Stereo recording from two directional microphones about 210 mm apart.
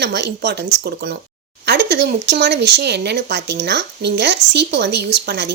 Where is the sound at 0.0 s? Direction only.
55° right (ahead or behind).